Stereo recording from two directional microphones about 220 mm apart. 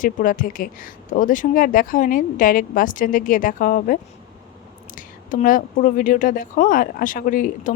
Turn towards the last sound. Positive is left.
turn(degrees=35)  # may be behind; listen again after turning